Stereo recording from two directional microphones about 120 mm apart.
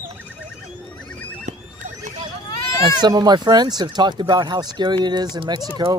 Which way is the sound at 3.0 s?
35° right (ahead or behind).